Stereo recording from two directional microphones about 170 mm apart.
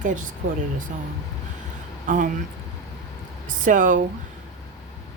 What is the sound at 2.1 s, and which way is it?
Speech, 50° right (ahead or behind).